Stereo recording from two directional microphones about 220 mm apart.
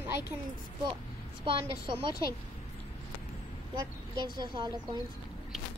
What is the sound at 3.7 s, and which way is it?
Speech, 20° right (ahead or behind).